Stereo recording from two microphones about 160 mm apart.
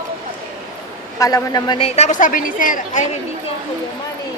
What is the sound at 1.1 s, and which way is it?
A woman's voice, 20° left (ahead or behind).